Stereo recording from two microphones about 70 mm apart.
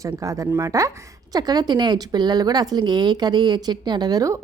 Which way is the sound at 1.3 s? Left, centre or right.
Right.